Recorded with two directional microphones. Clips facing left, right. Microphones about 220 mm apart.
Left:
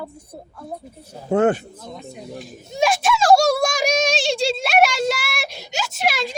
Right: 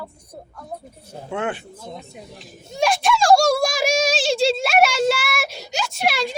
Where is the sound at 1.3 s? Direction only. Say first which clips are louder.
Left 9 dB; 40° left (ahead or behind).